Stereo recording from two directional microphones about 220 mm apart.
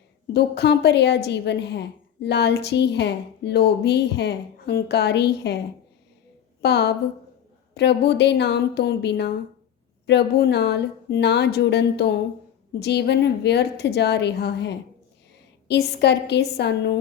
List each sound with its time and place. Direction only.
0.3 s a woman's voice: 50° left (ahead or behind)
6.6 s a woman's voice: 50° left (ahead or behind)